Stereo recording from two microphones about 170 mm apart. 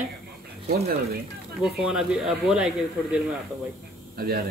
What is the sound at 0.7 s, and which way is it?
Speech, 65° right (ahead or behind).